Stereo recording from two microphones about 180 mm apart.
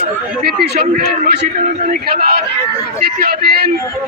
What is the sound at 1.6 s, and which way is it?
A man's voice, 45° right (ahead or behind).